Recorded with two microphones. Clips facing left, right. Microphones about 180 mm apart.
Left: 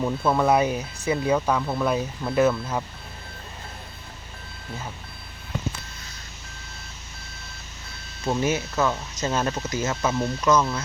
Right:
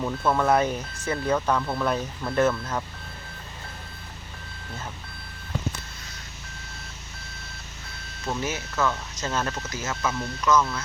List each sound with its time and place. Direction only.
0.0 s speech: 10° left (ahead or behind)
8.2 s speech: 25° left (ahead or behind)
9.8 s speech: 35° left (ahead or behind)
10.4 s speech: 20° left (ahead or behind)